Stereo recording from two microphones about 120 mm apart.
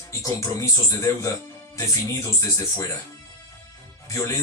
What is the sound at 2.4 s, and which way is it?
Speech, 25° left (ahead or behind).